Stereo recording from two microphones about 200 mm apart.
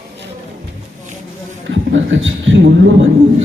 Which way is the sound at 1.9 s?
70° right (ahead or behind).